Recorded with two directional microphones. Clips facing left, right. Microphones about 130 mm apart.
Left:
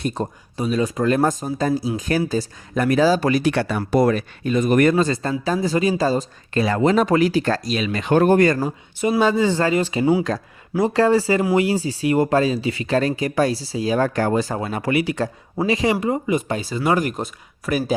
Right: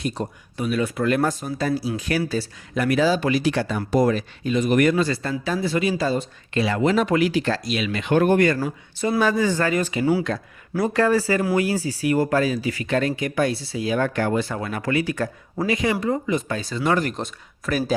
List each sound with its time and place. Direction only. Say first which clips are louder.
0.1 s speech: left 3 dB; 40° left (ahead or behind)
9.0 s speech: left 3 dB; 20° left (ahead or behind)
10.3 s speech: left 2 dB; 40° left (ahead or behind)
10.8 s speech: left 3 dB; 25° left (ahead or behind)
14.6 s speech: left 2 dB; 25° left (ahead or behind)
16.0 s speech: left 2 dB; 15° left (ahead or behind)